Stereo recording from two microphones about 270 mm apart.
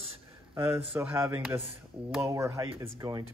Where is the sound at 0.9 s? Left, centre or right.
Centre.